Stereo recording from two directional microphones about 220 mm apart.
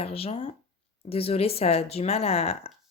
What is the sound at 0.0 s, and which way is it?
Speech, 25° left (ahead or behind).